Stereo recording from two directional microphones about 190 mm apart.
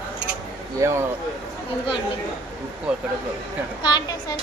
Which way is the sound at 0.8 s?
15° right (ahead or behind).